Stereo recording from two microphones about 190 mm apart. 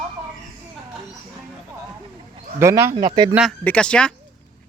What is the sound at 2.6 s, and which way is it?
Speech, 15° right (ahead or behind).